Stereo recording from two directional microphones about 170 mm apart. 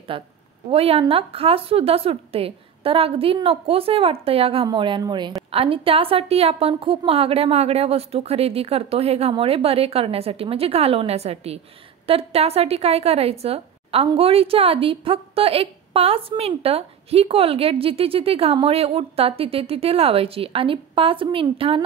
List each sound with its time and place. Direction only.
0.1 s a woman's voice: 30° right (ahead or behind)